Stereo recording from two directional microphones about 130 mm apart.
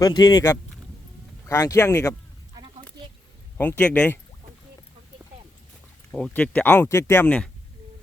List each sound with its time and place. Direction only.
0.0 s speech: 30° left (ahead or behind)
3.0 s a sound: 35° right (ahead or behind)
3.6 s speech: 15° left (ahead or behind)
6.1 s speech: 10° left (ahead or behind)